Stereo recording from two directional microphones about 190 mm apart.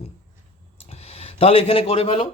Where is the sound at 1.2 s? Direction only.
30° left (ahead or behind).